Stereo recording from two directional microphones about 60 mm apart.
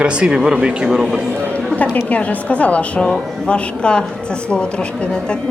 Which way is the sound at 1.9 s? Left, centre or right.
Left.